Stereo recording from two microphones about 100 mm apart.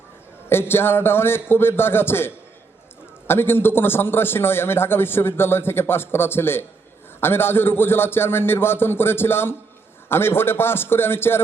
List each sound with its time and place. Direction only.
0.7 s a man's voice: 25° left (ahead or behind)